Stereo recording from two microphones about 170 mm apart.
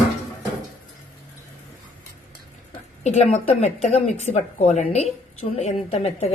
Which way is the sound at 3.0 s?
40° left (ahead or behind).